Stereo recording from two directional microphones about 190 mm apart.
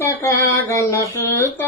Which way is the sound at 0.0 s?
10° left (ahead or behind).